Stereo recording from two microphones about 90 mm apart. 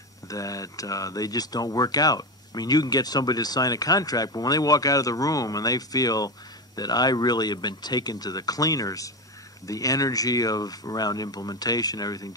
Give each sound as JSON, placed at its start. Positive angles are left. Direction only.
{"t": 0.3, "sound": "speech", "side_deg": 40}